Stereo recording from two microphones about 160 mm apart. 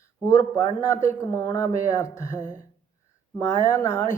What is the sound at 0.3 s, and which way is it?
Speech, 20° left (ahead or behind).